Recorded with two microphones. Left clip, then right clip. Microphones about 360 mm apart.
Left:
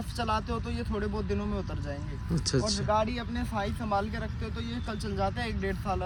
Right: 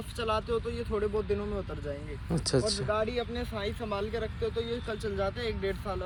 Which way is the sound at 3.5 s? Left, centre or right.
Centre.